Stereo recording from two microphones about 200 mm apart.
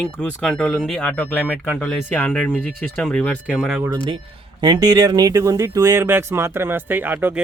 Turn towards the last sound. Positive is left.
turn(degrees=-10)  # may be behind; listen again after turning